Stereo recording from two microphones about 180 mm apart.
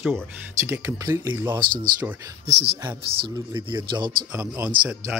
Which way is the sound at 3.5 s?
25° right (ahead or behind).